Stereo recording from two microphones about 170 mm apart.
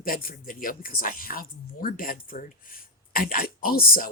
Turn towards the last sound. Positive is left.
turn(degrees=60)  # may be behind; listen again after turning